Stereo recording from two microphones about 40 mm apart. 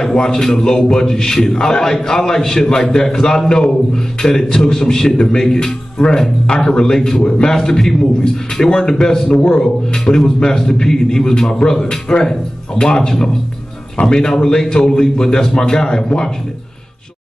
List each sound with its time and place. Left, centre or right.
0.0 s a man's voice: centre